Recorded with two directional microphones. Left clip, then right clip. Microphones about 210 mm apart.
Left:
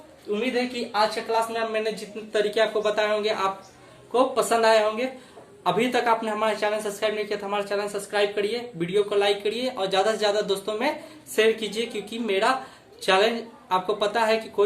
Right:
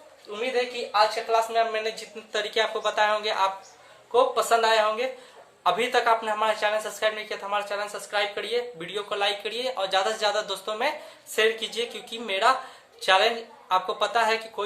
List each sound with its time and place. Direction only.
0.3 s a woman's voice: 25° right (ahead or behind)